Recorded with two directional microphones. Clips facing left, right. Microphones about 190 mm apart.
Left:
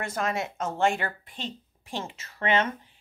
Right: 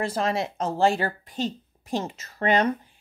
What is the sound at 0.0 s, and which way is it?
Speech, 30° right (ahead or behind).